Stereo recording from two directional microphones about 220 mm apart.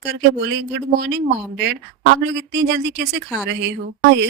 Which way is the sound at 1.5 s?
50° right (ahead or behind).